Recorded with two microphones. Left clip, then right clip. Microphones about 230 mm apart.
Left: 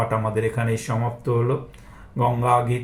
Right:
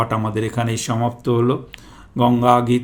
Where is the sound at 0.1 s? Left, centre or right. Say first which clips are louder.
Right 1 dB; right.